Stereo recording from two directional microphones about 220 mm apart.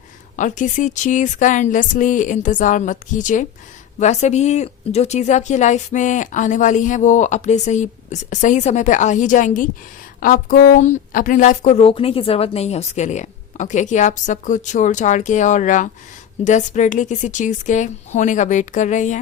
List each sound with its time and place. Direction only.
0.3 s speech: 35° left (ahead or behind)